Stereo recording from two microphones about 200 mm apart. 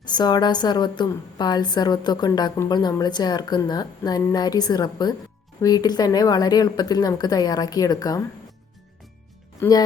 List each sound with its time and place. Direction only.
0.0 s a woman's voice: 20° left (ahead or behind)
9.6 s speech: 20° left (ahead or behind)